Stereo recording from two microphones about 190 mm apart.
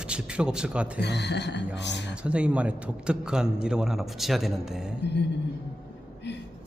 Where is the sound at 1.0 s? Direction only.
60° left (ahead or behind).